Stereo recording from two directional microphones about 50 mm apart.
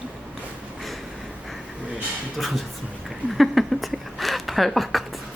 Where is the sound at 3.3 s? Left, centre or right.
Centre.